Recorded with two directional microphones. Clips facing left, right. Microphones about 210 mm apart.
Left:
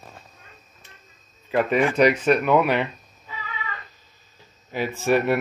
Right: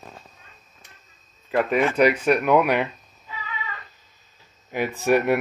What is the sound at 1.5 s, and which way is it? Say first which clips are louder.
Speech: left 1 dB; centre (ahead or behind).